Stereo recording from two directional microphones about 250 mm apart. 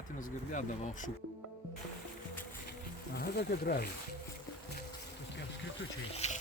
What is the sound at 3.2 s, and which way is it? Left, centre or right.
Speech, left.